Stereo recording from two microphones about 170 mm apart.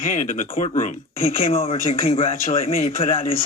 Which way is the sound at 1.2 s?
35° left (ahead or behind).